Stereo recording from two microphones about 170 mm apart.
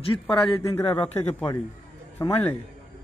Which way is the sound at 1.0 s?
40° left (ahead or behind).